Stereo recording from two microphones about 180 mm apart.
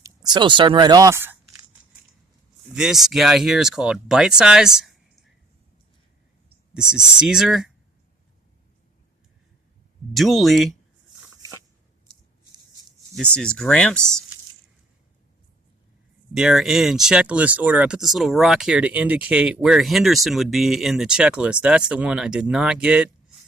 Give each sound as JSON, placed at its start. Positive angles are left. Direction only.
{"t": 0.0, "sound": "speech", "side_deg": -20}
{"t": 2.7, "sound": "speech", "side_deg": 0}
{"t": 6.9, "sound": "speech", "side_deg": -5}
{"t": 10.2, "sound": "speech", "side_deg": 0}
{"t": 13.1, "sound": "speech", "side_deg": 5}
{"t": 16.3, "sound": "speech", "side_deg": 0}